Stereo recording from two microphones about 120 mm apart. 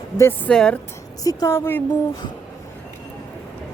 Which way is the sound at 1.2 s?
30° left (ahead or behind).